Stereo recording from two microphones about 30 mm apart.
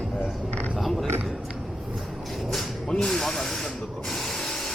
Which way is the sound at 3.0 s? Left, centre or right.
Centre.